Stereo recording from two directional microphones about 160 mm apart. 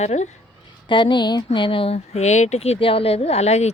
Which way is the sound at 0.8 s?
30° left (ahead or behind).